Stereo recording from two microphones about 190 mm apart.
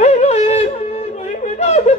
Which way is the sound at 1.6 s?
35° left (ahead or behind).